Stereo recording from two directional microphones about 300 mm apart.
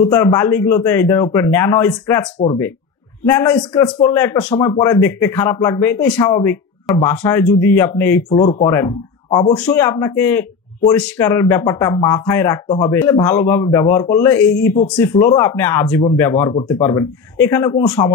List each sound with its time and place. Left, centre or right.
0.1 s a man's voice: centre